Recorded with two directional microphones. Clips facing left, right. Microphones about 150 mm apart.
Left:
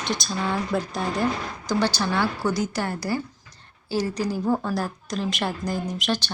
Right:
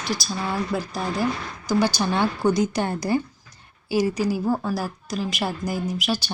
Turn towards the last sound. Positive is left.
turn(degrees=-5)  # may be behind; listen again after turning